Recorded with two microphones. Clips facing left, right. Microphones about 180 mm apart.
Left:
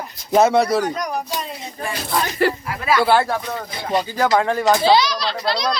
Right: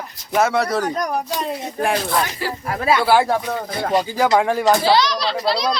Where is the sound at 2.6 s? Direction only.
45° right (ahead or behind).